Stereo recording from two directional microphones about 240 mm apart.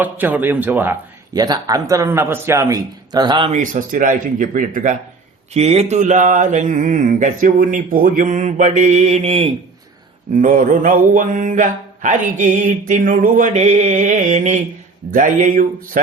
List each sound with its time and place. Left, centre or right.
0.0 s speech: centre; by 4.9 s right
5.5 s mantra: right